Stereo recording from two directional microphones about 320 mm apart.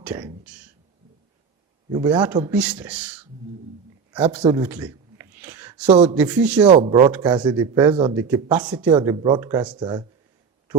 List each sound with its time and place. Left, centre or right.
0.0 s speech: centre
1.9 s speech: centre
4.2 s speech: centre
6.1 s speech: centre
6.7 s speech: centre